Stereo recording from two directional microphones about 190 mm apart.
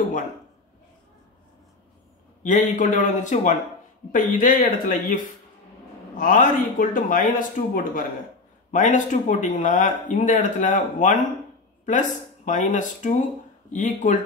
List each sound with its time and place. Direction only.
2.4 s speech: 40° left (ahead or behind)